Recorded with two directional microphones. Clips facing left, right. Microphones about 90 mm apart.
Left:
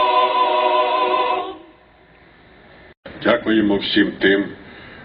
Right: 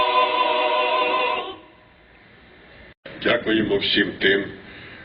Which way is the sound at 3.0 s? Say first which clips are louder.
Left 4 dB; 25° left (ahead or behind).